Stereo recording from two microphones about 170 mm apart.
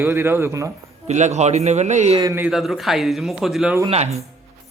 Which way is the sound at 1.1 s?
45° right (ahead or behind).